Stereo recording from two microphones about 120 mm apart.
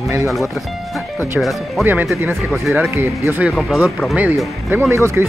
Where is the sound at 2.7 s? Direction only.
20° right (ahead or behind).